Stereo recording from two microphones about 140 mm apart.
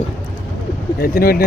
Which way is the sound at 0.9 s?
90° left.